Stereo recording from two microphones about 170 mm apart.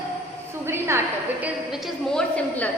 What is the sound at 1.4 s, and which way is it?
A woman's voice, centre (ahead or behind).